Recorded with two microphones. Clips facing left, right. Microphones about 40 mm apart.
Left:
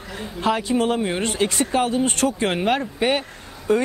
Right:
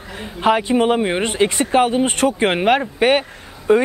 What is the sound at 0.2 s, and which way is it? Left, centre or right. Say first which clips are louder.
Speech: right 5 dB; right.